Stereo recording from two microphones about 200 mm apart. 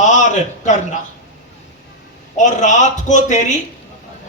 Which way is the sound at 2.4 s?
35° left (ahead or behind).